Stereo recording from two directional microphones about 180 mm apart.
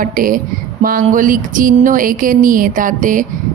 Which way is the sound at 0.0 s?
50° right (ahead or behind).